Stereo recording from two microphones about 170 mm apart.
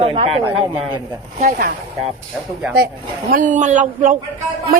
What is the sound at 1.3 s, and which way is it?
Speech, 55° right (ahead or behind).